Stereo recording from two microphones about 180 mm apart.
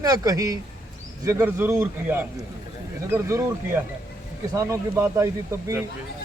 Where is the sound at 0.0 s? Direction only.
20° right (ahead or behind).